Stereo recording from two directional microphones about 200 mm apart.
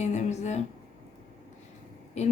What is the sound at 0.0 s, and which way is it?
Speech, 35° left (ahead or behind).